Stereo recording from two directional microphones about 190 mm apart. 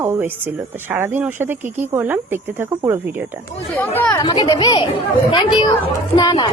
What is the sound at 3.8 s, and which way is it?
Speech, 10° left (ahead or behind).